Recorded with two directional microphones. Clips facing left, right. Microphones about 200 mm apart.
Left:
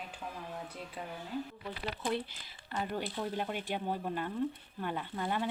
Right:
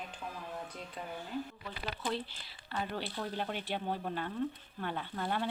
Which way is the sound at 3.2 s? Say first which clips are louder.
Left 2 dB; 5° left (ahead or behind).